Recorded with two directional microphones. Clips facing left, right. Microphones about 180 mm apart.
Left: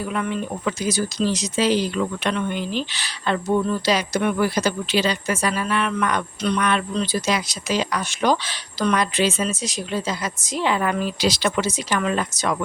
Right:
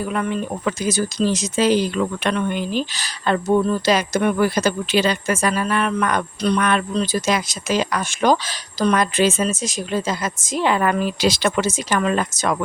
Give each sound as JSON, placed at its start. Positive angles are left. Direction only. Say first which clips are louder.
{"t": 0.1, "sound": "speech", "louder": "right 2 dB", "side_deg": -45}